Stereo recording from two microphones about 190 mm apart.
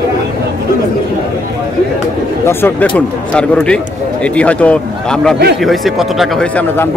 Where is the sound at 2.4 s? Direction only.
10° left (ahead or behind).